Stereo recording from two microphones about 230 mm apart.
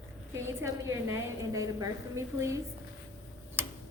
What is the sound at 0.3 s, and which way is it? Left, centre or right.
A woman's voice, centre.